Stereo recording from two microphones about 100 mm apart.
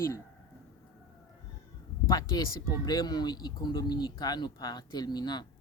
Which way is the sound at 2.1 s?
40° left (ahead or behind).